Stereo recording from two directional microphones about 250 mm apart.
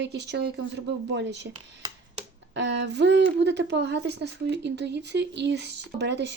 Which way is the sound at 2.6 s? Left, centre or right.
Right.